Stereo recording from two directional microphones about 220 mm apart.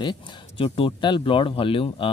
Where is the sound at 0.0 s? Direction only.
20° left (ahead or behind).